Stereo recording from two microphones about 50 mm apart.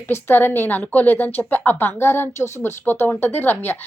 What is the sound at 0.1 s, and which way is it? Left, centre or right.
A woman's voice, left.